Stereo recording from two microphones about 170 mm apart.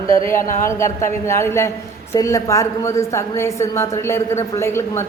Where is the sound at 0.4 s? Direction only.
50° left (ahead or behind).